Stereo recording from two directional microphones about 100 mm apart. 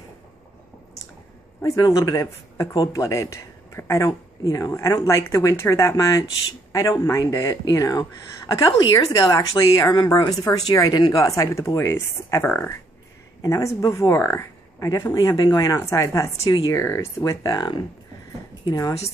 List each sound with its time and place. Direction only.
1.8 s a man's voice: 40° left (ahead or behind); by 12.7 s 20° left (ahead or behind)
13.4 s speech: 30° left (ahead or behind)
14.9 s a man's voice: 35° left (ahead or behind)
16.4 s speech: 45° left (ahead or behind)
16.7 s speech: 25° left (ahead or behind)
17.6 s speech: 45° left (ahead or behind)